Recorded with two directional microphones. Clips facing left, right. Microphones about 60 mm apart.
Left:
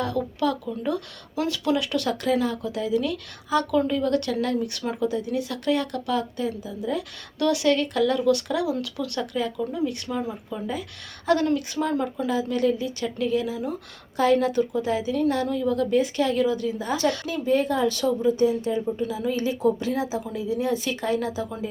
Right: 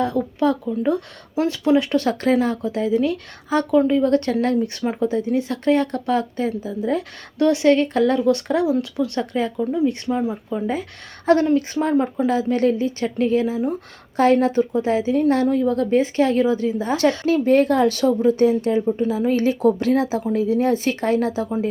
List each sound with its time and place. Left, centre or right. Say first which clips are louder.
0.0 s speech: right 5 dB; right
17.2 s speech: right 7 dB; right